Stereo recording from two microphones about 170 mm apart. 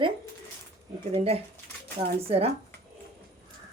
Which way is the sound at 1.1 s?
35° right (ahead or behind).